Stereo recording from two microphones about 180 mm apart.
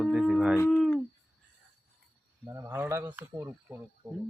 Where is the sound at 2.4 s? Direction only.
15° right (ahead or behind).